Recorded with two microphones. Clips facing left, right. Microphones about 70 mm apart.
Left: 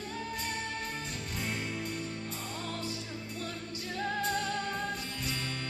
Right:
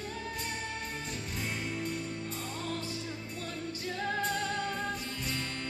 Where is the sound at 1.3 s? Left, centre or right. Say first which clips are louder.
Left 1 dB; centre.